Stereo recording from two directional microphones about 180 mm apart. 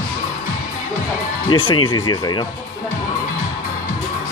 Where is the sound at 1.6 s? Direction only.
25° left (ahead or behind).